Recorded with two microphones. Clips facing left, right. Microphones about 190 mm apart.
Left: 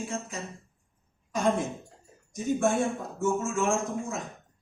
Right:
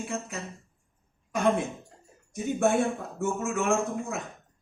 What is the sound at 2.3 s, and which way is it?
Speech, 65° right (ahead or behind).